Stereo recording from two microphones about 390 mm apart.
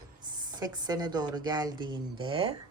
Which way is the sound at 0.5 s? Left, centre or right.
Centre.